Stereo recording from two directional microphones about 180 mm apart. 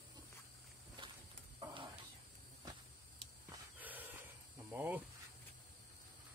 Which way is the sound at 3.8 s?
10° right (ahead or behind).